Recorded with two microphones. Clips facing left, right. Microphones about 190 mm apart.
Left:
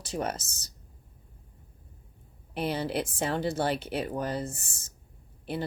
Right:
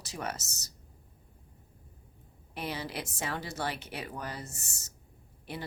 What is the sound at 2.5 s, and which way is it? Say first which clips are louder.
A woman's voice: left 7 dB; 30° left (ahead or behind).